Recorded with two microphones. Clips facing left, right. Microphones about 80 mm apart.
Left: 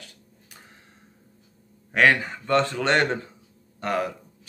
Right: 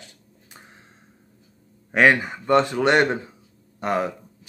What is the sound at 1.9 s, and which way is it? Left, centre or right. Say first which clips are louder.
Speech: right 2 dB; right.